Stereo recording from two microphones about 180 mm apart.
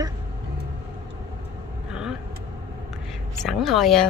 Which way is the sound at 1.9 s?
5° right (ahead or behind).